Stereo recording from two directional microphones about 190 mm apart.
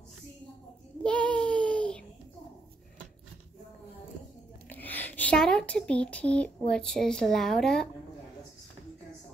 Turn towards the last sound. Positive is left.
turn(degrees=5)  # may be behind; listen again after turning